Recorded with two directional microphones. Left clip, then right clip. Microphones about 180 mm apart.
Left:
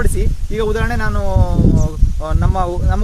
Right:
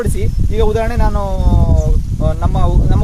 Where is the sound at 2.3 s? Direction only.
25° left (ahead or behind).